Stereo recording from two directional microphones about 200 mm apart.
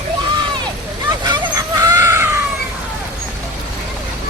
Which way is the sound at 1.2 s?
20° right (ahead or behind).